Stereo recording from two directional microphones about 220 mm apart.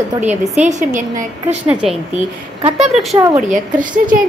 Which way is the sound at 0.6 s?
35° right (ahead or behind).